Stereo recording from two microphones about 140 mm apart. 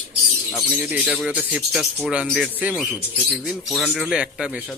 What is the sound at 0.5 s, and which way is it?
Speech, 10° right (ahead or behind).